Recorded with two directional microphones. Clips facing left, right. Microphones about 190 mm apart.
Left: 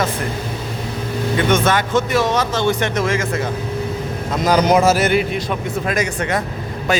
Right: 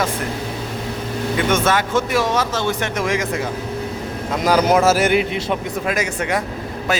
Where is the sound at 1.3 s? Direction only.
5° right (ahead or behind).